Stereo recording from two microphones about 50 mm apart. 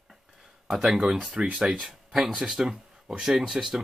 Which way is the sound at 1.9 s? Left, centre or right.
Centre.